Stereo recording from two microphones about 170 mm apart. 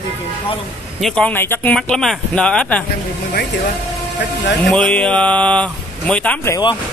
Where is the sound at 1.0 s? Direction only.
5° left (ahead or behind).